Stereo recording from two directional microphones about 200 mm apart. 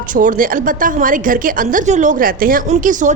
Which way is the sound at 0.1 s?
40° right (ahead or behind).